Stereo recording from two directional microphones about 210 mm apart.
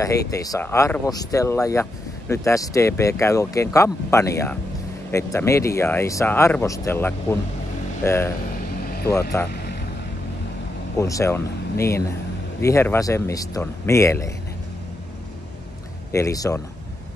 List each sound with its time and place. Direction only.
0.3 s speech: 15° left (ahead or behind)
8.8 s vehicle: 45° left (ahead or behind)
9.4 s speech: 10° left (ahead or behind)
11.0 s speech: 15° left (ahead or behind)
12.6 s speech: 15° left (ahead or behind)
16.1 s speech: 15° left (ahead or behind)